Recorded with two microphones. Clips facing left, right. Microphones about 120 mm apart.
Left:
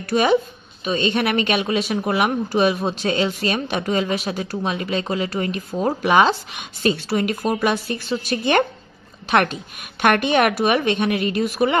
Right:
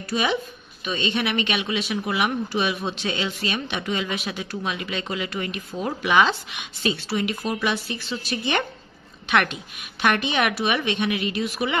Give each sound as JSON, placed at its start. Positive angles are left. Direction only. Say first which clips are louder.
{"t": 0.1, "sound": "a woman's voice", "louder": "left 7 dB", "side_deg": 45}
{"t": 9.3, "sound": "speech", "louder": "left 4 dB", "side_deg": 35}
{"t": 10.0, "sound": "a woman's voice", "louder": "left 5 dB", "side_deg": 50}